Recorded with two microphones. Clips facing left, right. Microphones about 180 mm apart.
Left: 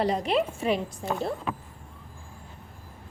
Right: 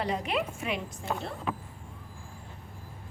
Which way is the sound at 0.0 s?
35° left (ahead or behind).